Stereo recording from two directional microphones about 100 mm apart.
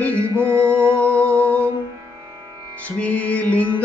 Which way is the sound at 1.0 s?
15° left (ahead or behind).